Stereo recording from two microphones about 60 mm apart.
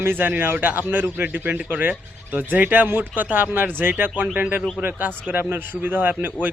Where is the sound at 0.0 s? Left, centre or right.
Right.